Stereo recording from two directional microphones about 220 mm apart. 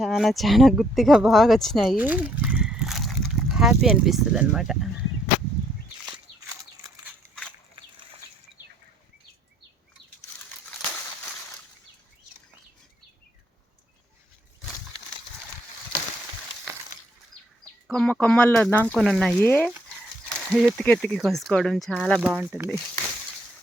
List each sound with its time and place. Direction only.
0.0 s speech: centre (ahead or behind)
6.1 s walk: 15° right (ahead or behind)
17.8 s speech: 5° left (ahead or behind)